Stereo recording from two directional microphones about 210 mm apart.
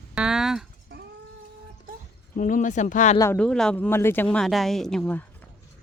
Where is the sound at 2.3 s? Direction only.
40° left (ahead or behind).